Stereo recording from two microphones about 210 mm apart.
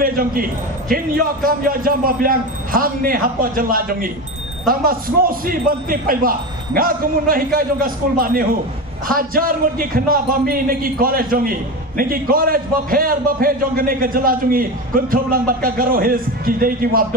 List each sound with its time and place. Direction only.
0.0 s a man's voice: 45° right (ahead or behind)